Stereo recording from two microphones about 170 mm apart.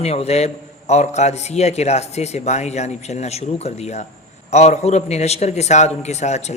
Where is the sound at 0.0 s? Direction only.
40° left (ahead or behind).